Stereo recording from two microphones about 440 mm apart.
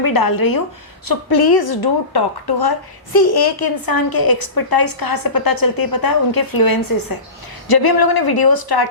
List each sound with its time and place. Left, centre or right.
0.0 s a woman's voice: left